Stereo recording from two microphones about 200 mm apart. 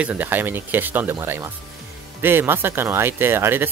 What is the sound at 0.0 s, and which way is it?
Speech, 10° right (ahead or behind).